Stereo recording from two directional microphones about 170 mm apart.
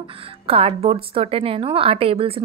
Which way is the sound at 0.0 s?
35° right (ahead or behind).